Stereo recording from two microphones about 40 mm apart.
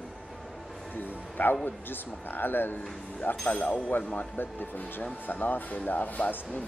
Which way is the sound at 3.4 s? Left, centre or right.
Left.